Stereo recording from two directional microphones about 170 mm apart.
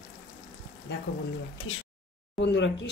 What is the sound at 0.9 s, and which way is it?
Speech, 85° left.